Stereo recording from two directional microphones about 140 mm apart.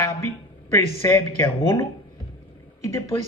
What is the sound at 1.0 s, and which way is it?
Speech, 20° left (ahead or behind).